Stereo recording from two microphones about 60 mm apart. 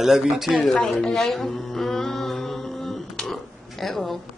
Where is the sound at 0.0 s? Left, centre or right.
Centre.